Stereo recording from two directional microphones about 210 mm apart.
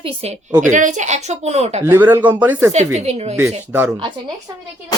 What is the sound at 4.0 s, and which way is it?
Speech, 20° right (ahead or behind).